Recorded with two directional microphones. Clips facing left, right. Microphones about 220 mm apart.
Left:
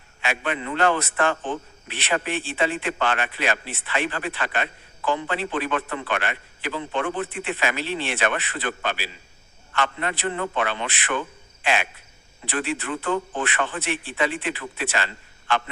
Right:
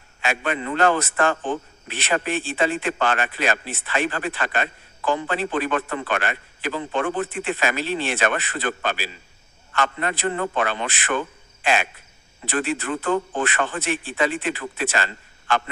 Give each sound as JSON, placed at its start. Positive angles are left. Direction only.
{"t": 0.2, "sound": "a man's voice", "side_deg": -45}
{"t": 11.6, "sound": "cricket", "side_deg": -45}
{"t": 12.5, "sound": "a man's voice", "side_deg": -45}